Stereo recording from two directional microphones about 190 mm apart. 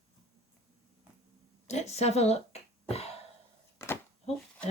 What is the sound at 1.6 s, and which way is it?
Speech, 35° left (ahead or behind).